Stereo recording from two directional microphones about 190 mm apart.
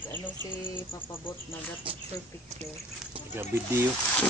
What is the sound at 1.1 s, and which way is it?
Speech, 10° left (ahead or behind).